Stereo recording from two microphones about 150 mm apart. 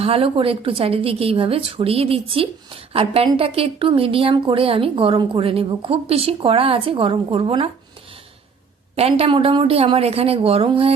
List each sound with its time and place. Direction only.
0.0 s speech: 40° right (ahead or behind)
9.0 s speech: 40° right (ahead or behind)